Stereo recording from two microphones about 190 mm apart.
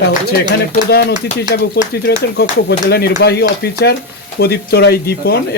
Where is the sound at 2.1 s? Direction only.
65° left (ahead or behind).